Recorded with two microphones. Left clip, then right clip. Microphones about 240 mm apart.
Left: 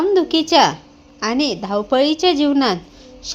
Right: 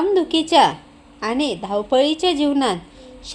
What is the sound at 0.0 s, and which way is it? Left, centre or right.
A woman's voice, left.